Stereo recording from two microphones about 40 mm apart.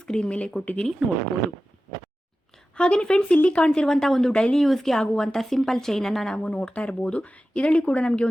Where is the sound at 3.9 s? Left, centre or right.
Centre.